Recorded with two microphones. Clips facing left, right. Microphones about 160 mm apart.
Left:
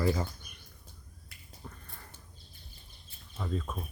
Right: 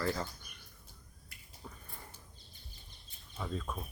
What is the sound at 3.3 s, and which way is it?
Speech, centre (ahead or behind).